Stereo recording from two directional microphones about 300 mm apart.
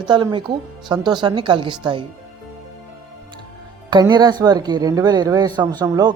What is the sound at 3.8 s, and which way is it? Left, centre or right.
Speech, centre.